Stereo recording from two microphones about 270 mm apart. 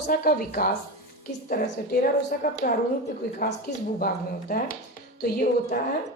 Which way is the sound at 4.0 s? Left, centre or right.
Left.